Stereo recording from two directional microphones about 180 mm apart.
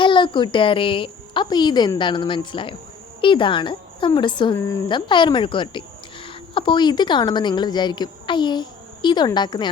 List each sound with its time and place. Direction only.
0.0 s a woman's voice: 25° left (ahead or behind)